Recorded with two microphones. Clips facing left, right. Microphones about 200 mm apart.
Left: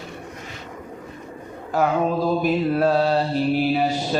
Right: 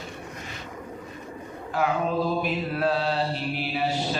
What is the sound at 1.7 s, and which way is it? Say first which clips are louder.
Mantra: left 4 dB; 40° left (ahead or behind).